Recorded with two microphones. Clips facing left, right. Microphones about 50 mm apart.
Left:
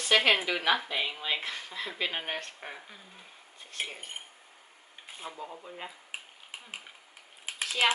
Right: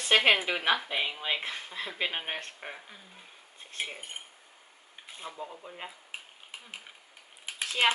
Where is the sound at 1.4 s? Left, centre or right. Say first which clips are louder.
Even; centre.